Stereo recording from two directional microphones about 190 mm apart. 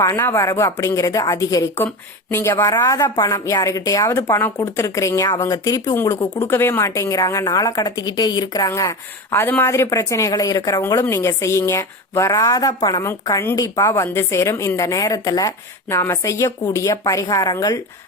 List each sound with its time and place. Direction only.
0.0 s a woman's voice: 15° left (ahead or behind)